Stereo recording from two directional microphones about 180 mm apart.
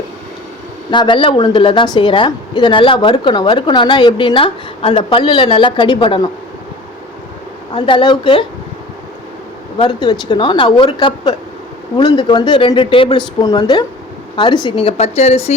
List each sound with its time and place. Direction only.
0.9 s a woman's voice: 25° left (ahead or behind)
7.7 s a woman's voice: 30° left (ahead or behind)
9.7 s a woman's voice: 25° left (ahead or behind)